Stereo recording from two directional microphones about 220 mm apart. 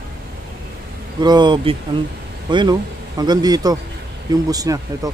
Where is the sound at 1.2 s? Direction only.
20° right (ahead or behind).